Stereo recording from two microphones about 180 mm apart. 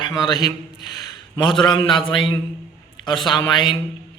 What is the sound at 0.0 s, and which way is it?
A man's voice, 25° left (ahead or behind).